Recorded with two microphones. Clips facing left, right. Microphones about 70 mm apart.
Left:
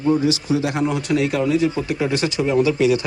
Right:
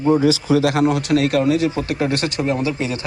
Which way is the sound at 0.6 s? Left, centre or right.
Right.